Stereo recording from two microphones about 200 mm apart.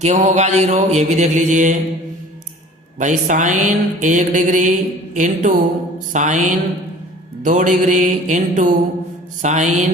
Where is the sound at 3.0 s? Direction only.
40° right (ahead or behind).